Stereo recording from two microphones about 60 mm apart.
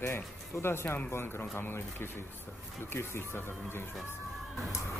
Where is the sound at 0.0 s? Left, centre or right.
Left.